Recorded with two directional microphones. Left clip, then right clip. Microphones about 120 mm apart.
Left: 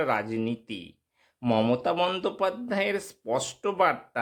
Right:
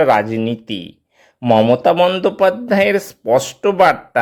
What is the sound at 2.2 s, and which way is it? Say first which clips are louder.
Speech: right 14 dB; 30° right (ahead or behind).